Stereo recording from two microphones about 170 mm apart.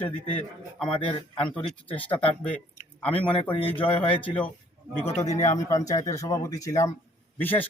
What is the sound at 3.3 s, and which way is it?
Speech, 30° left (ahead or behind).